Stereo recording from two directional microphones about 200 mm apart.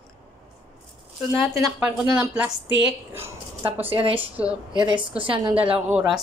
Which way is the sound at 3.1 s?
10° right (ahead or behind).